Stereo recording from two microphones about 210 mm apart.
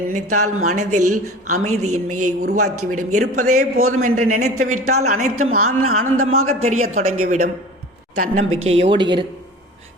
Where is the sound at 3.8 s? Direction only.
80° right.